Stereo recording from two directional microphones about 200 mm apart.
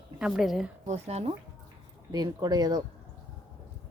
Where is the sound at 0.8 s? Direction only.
35° right (ahead or behind).